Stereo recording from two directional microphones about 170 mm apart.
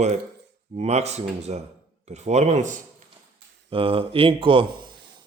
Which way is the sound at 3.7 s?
30° right (ahead or behind).